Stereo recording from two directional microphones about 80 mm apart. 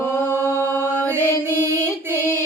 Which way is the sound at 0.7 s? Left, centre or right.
Right.